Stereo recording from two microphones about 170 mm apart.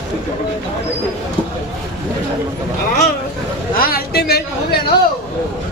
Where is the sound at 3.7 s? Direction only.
60° left (ahead or behind).